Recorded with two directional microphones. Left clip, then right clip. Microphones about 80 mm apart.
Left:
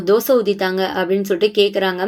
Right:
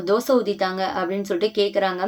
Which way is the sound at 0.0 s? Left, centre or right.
Left.